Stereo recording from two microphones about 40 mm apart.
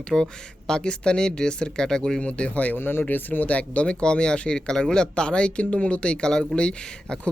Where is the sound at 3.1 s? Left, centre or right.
Left.